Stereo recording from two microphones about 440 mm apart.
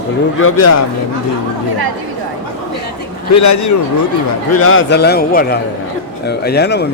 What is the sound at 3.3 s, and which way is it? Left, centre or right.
Speech, left.